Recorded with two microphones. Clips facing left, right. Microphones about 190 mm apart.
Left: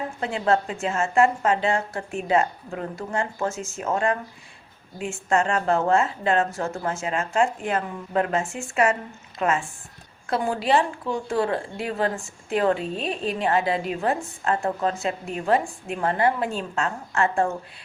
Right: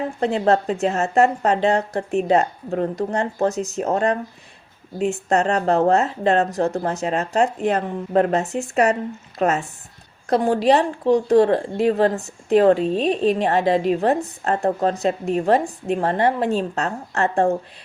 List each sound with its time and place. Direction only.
0.2 s a woman's voice: 40° right (ahead or behind)